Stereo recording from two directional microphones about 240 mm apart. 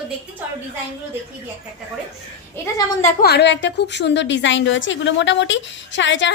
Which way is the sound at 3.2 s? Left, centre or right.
Left.